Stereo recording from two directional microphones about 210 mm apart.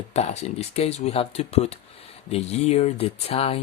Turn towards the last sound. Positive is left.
turn(degrees=30)  # may be behind; listen again after turning